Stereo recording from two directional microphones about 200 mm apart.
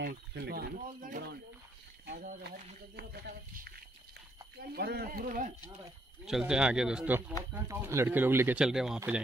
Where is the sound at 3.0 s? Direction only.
50° right (ahead or behind).